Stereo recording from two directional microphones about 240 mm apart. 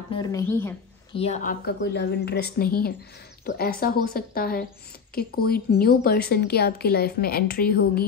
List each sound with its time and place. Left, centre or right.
0.1 s speech: centre
1.1 s a woman's voice: left